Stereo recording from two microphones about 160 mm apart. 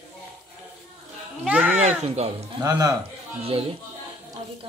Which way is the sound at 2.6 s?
25° right (ahead or behind).